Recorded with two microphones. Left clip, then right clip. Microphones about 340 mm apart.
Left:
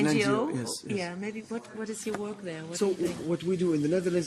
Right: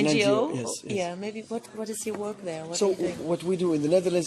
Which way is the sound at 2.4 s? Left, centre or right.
Centre.